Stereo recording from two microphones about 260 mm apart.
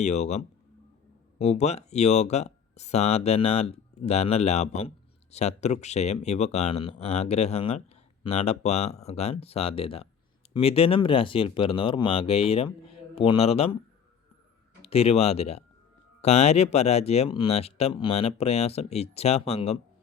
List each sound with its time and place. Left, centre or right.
0.0 s speech: left
14.8 s speech: left